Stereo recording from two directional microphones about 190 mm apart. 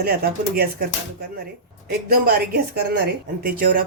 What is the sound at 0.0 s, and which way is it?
Speech, 55° right (ahead or behind).